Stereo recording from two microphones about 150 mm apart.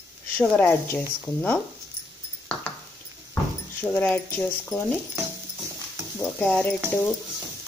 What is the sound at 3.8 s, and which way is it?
Speech, 10° left (ahead or behind).